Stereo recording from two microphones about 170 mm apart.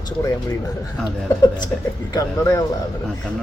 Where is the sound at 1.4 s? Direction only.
25° left (ahead or behind).